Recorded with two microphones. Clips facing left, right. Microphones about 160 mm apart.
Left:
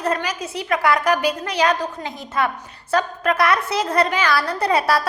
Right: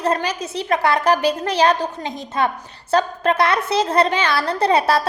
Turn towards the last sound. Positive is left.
turn(degrees=-25)  # may be behind; listen again after turning